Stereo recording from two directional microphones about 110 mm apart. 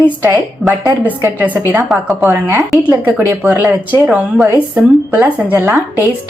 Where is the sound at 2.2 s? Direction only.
20° right (ahead or behind).